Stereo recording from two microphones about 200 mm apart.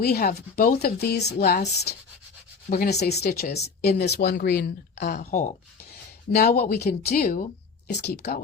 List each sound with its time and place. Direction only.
0.0 s speech: 50° left (ahead or behind)
5.1 s speech: 45° left (ahead or behind)
7.9 s speech: 60° left (ahead or behind)